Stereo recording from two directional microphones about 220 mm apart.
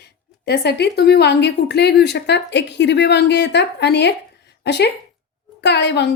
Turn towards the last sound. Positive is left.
turn(degrees=50)  # may be behind; listen again after turning